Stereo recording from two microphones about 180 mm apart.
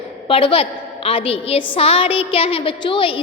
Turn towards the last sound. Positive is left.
turn(degrees=30)  # may be behind; listen again after turning